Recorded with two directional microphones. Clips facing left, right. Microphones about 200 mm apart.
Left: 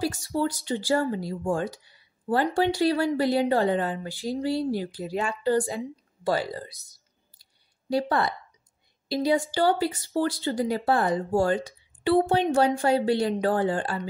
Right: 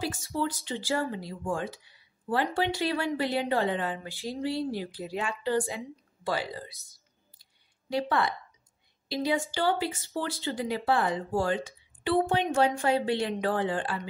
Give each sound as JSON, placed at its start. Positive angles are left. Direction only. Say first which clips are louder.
{"t": 0.0, "sound": "a woman's voice", "louder": "left 4 dB", "side_deg": 40}
{"t": 7.9, "sound": "speech", "louder": "left 3 dB", "side_deg": 35}